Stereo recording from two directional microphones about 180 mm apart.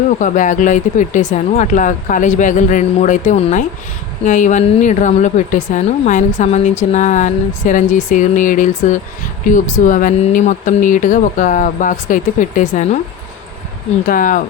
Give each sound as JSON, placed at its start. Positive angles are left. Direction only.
{"t": 0.2, "sound": "a woman's voice", "side_deg": 45}
{"t": 14.1, "sound": "a woman's voice", "side_deg": 50}